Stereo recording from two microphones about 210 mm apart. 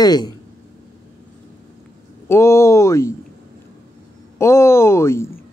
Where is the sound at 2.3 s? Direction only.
15° left (ahead or behind).